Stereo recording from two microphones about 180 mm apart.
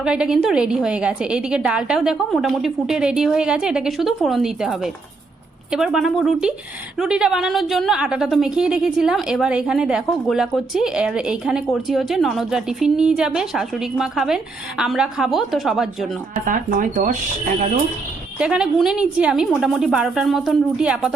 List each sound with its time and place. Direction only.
0.0 s a woman's voice: 5° right (ahead or behind)
16.5 s speech: 45° right (ahead or behind)
18.3 s a woman's voice: 5° right (ahead or behind)